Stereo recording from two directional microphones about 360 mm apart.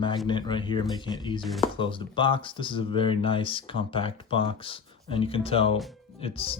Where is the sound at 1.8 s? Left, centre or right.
Centre.